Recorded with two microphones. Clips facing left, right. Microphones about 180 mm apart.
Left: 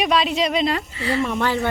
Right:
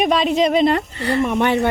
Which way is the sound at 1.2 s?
20° right (ahead or behind).